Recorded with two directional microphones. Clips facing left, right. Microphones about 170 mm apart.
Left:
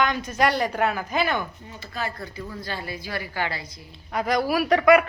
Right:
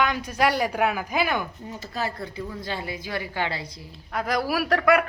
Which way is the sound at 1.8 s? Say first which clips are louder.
Right 1 dB; 35° right (ahead or behind).